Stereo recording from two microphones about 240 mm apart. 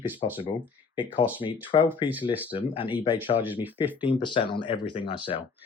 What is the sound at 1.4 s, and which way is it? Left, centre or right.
Speech, left.